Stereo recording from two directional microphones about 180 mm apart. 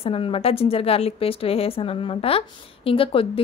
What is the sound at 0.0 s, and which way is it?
A woman's voice, 30° left (ahead or behind).